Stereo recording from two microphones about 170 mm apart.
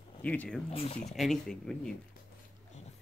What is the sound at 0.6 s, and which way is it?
Speech, 35° left (ahead or behind).